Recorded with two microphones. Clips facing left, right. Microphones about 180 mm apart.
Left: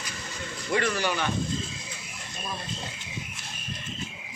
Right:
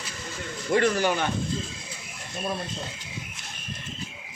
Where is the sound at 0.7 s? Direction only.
45° right (ahead or behind).